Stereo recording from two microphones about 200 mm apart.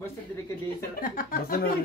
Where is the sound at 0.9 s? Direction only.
45° left (ahead or behind).